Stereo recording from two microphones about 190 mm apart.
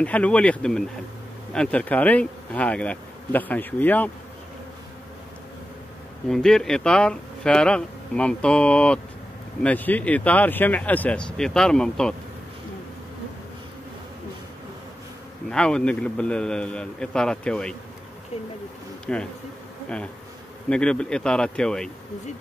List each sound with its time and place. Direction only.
0.0 s speech: 5° left (ahead or behind)
6.2 s speech: centre (ahead or behind)
15.5 s speech: 5° left (ahead or behind)
19.1 s speech: 5° left (ahead or behind)
20.7 s speech: 5° left (ahead or behind)